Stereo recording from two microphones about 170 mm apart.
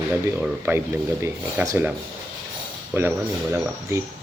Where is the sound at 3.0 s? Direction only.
15° right (ahead or behind).